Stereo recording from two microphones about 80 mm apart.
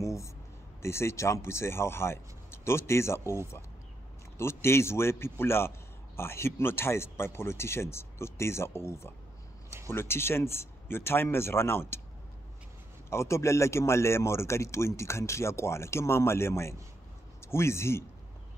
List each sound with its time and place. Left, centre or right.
0.0 s a sound: left
0.8 s speech: left
4.4 s speech: left
13.1 s a man's voice: left